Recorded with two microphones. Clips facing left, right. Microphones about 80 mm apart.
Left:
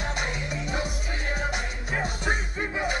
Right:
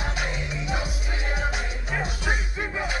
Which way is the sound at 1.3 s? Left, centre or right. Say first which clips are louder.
Right 1 dB; centre.